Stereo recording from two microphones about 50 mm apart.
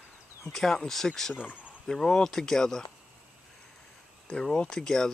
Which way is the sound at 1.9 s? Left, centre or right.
Centre.